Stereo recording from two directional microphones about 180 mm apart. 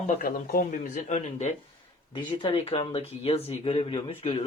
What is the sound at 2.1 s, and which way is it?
Speech, 25° left (ahead or behind).